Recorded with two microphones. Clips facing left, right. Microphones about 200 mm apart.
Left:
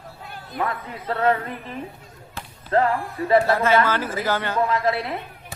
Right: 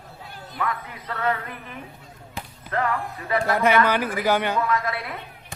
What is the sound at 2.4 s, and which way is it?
Basketball bounce, 15° right (ahead or behind).